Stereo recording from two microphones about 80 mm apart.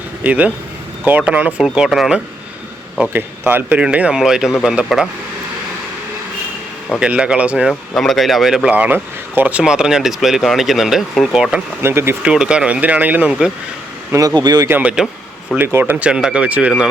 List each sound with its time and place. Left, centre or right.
0.2 s speech: centre
3.1 s speech: right; by 5.0 s centre
7.0 s speech: centre
7.7 s speech: centre
8.7 s speech: right
9.6 s speech: centre
11.8 s speech: right
12.2 s speech: centre
14.1 s a man's voice: right
14.3 s speech: right
14.7 s speech: centre
15.5 s speech: right